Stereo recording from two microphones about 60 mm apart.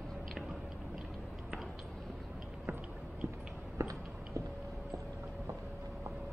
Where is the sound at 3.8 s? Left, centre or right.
Right.